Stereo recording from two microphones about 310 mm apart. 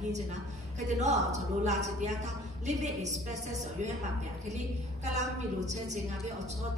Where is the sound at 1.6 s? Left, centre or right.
Right.